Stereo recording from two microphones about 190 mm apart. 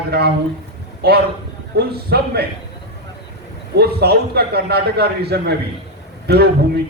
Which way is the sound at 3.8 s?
55° right (ahead or behind).